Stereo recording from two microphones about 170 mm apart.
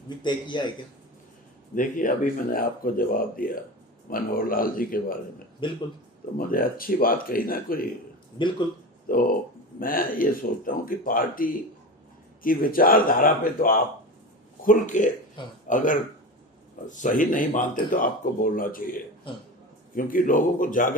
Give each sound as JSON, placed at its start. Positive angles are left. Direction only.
{"t": 0.2, "sound": "a man's voice", "side_deg": 25}
{"t": 1.7, "sound": "speech", "side_deg": 50}
{"t": 5.6, "sound": "a man's voice", "side_deg": 30}
{"t": 6.3, "sound": "speech", "side_deg": 55}
{"t": 8.4, "sound": "a man's voice", "side_deg": 25}
{"t": 9.0, "sound": "speech", "side_deg": 55}
{"t": 20.0, "sound": "speech", "side_deg": 55}